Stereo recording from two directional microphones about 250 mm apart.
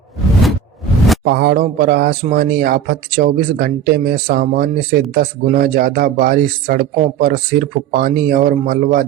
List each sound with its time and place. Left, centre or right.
1.2 s speech: right